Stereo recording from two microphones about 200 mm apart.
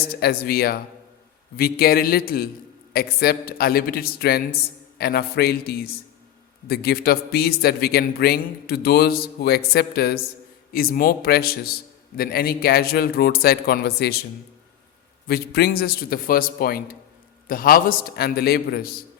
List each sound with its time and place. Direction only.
0.1 s a man's voice: 50° left (ahead or behind)
15.3 s a man's voice: 50° left (ahead or behind)